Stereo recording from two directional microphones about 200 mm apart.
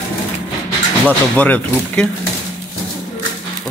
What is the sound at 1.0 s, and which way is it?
Speech, 5° left (ahead or behind).